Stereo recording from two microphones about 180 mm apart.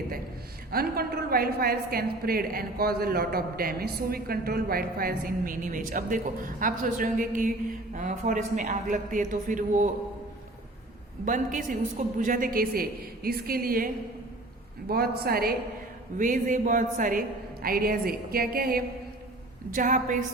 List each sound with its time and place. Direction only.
0.7 s a woman's voice: 55° right (ahead or behind)
11.3 s a man's voice: 45° right (ahead or behind)
16.1 s a woman's voice: 45° right (ahead or behind)